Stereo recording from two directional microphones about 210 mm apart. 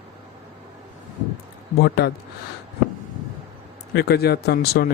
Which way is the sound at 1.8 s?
50° left (ahead or behind).